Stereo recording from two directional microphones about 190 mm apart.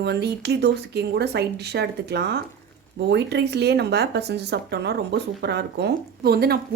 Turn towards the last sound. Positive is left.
turn(degrees=-55)  # may be behind; listen again after turning